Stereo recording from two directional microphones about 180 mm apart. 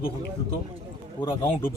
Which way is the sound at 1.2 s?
15° left (ahead or behind).